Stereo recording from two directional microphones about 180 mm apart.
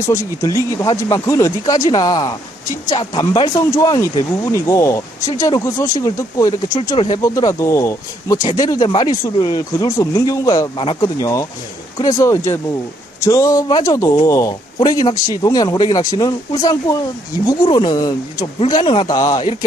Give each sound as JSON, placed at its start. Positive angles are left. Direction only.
{"t": 0.0, "sound": "speech", "side_deg": 20}